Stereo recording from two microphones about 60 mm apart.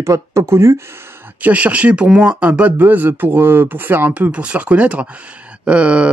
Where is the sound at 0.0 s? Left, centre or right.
Right.